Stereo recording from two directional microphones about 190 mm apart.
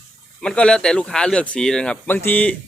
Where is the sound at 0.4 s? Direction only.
5° left (ahead or behind).